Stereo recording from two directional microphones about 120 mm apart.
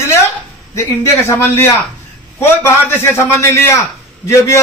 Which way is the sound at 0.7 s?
20° left (ahead or behind).